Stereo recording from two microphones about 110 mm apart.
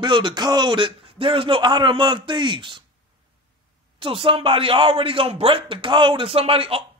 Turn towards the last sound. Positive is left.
turn(degrees=-55)  # may be behind; listen again after turning